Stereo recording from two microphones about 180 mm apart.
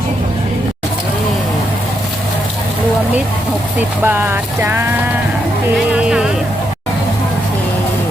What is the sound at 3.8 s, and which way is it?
Speech, 10° right (ahead or behind).